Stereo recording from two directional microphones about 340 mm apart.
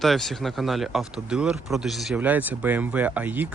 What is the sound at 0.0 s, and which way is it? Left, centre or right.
Speech, centre.